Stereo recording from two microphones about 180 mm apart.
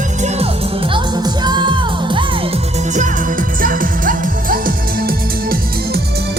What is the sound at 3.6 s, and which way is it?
Music, 50° right (ahead or behind).